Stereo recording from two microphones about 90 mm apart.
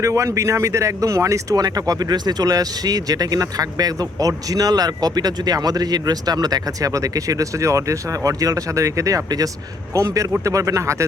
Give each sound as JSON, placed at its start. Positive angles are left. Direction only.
{"t": 0.0, "sound": "speech", "side_deg": -35}